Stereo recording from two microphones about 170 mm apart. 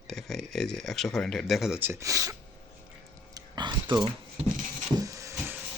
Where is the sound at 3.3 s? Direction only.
25° right (ahead or behind).